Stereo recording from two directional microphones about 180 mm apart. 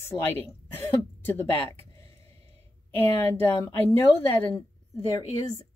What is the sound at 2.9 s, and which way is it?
Speech, 10° left (ahead or behind).